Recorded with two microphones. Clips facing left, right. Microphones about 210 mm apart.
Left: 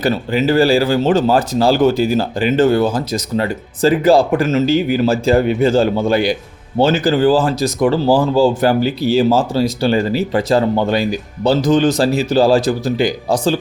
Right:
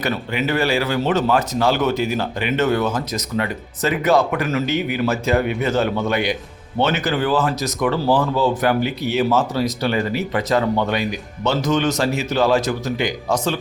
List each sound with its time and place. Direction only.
0.0 s speech: 30° left (ahead or behind)